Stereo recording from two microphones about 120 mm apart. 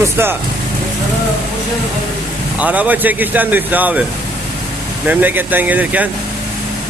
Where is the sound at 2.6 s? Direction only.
10° right (ahead or behind).